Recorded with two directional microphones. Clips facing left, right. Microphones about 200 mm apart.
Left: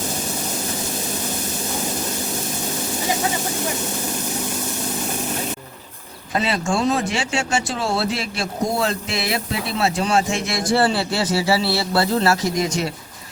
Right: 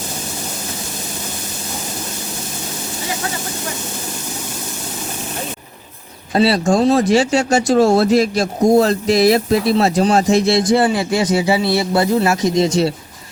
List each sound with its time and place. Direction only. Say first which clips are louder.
6.3 s speech: right 8 dB; 35° right (ahead or behind)
10.7 s a man's voice: right 4 dB; 15° right (ahead or behind)